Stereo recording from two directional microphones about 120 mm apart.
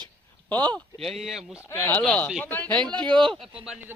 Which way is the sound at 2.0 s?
5° left (ahead or behind).